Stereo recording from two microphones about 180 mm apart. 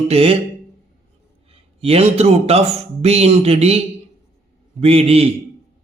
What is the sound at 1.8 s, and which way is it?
Speech, 35° right (ahead or behind).